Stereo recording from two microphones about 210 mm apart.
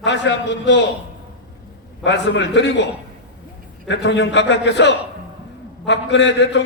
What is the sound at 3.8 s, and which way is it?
A man's voice, 55° left (ahead or behind).